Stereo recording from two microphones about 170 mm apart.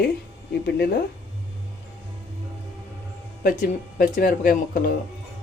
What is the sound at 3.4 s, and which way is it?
Speech, 55° left (ahead or behind).